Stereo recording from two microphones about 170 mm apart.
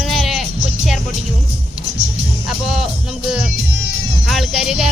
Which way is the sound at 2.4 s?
Centre (ahead or behind).